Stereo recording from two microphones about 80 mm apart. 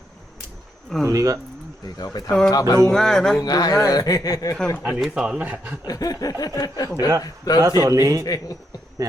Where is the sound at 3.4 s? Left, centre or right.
Left.